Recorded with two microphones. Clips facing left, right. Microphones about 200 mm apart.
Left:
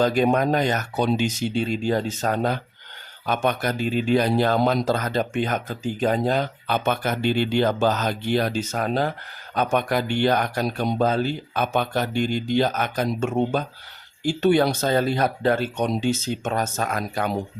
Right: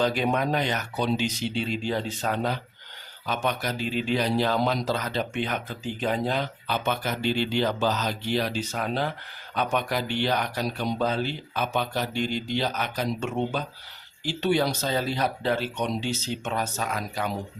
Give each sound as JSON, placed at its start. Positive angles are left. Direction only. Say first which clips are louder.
{"t": 0.0, "sound": "speech", "louder": "left 5 dB", "side_deg": 45}